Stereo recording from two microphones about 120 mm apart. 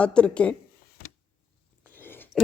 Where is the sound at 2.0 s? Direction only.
20° left (ahead or behind).